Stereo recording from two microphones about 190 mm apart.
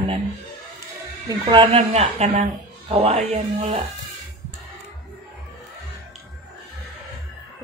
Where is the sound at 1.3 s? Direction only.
25° right (ahead or behind).